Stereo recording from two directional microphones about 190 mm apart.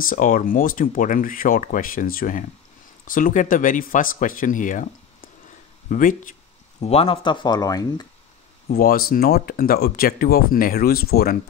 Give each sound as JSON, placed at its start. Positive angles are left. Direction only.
{"t": 0.0, "sound": "speech", "side_deg": 45}
{"t": 6.8, "sound": "speech", "side_deg": 30}
{"t": 8.6, "sound": "speech", "side_deg": 50}